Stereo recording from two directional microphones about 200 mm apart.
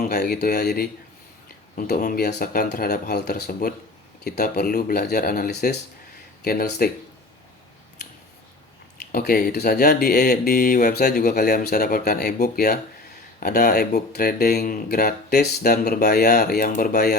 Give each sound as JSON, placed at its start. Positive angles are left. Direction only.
{"t": 0.1, "sound": "speech", "side_deg": 55}
{"t": 9.1, "sound": "speech", "side_deg": 50}